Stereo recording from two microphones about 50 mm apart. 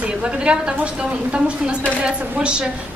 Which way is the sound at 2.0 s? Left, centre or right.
Centre.